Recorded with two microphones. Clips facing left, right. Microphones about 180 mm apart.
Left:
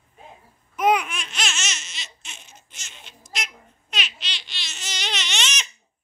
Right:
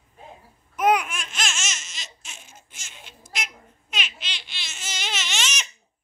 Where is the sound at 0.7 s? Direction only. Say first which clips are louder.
Even; centre (ahead or behind).